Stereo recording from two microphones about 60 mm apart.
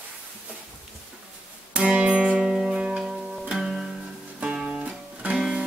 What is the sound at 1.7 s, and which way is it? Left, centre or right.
Guitar, centre.